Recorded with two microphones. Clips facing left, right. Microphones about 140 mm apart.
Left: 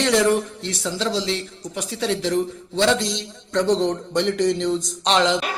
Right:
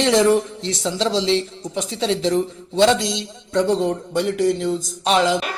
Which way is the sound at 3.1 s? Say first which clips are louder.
Right 2 dB; 10° right (ahead or behind).